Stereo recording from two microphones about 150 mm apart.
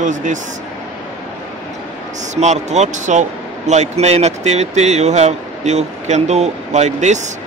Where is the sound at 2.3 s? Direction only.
50° right (ahead or behind).